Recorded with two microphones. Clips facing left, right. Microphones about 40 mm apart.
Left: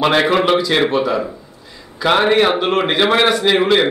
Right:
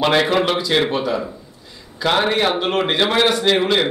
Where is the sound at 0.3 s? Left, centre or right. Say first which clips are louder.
Left 4 dB; centre.